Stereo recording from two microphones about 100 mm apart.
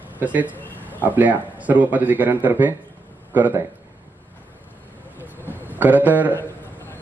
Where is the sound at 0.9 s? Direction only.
15° right (ahead or behind).